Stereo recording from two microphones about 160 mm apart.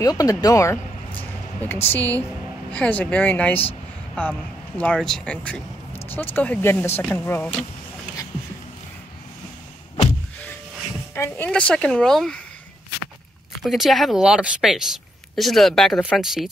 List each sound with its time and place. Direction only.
0.0 s speech: 20° left (ahead or behind)
1.9 s speech: 10° left (ahead or behind)
11.1 s speech: 15° left (ahead or behind)
13.6 s speech: centre (ahead or behind)